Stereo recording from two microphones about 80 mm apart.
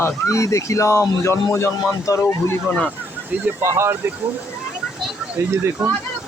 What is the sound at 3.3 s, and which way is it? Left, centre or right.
Speech, centre.